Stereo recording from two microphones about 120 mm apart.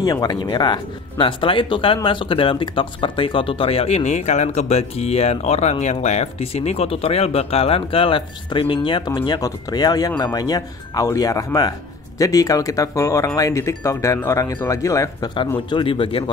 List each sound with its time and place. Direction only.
0.0 s speech: 35° left (ahead or behind)
15.7 s speech: 45° left (ahead or behind)